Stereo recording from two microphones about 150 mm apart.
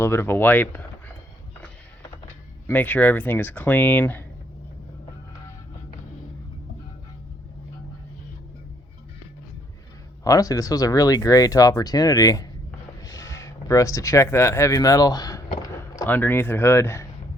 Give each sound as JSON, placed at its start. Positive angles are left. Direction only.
{"t": 0.0, "sound": "speech", "side_deg": 15}
{"t": 2.6, "sound": "speech", "side_deg": 10}
{"t": 10.2, "sound": "speech", "side_deg": 25}
{"t": 13.0, "sound": "a sound", "side_deg": 25}
{"t": 16.0, "sound": "speech", "side_deg": 10}